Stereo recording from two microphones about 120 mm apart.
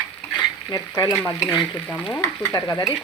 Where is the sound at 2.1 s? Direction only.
15° left (ahead or behind).